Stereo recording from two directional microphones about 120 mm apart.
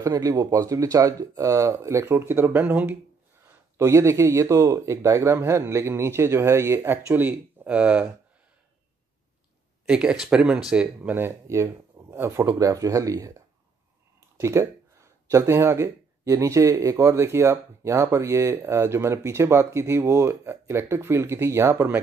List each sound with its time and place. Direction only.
0.0 s speech: 30° right (ahead or behind); by 3.0 s 15° right (ahead or behind)
3.4 s speech: 25° right (ahead or behind)
9.8 s speech: 10° right (ahead or behind)